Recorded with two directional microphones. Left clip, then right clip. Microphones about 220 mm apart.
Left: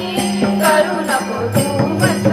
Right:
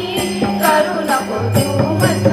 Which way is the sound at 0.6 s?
10° left (ahead or behind).